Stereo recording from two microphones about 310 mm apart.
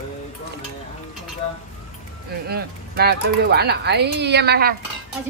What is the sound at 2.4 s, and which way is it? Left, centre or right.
Speech, right.